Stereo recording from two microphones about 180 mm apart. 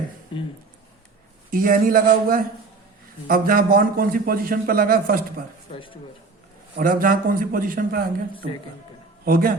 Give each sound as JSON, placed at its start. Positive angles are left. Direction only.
{"t": 1.5, "sound": "a man's voice", "side_deg": -50}
{"t": 5.7, "sound": "speech", "side_deg": 30}
{"t": 6.7, "sound": "a man's voice", "side_deg": -50}